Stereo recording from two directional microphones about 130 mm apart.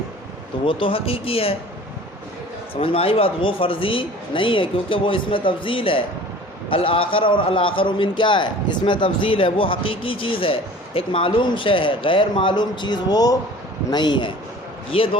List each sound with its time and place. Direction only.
0.6 s speech: 40° left (ahead or behind)
2.8 s a man's voice: 45° left (ahead or behind)